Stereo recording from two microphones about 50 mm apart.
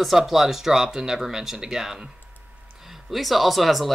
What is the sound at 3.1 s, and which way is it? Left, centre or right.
Speech, centre.